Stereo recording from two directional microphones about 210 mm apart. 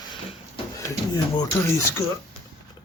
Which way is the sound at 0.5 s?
20° left (ahead or behind).